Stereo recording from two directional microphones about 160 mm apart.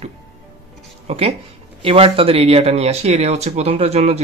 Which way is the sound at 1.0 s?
40° right (ahead or behind).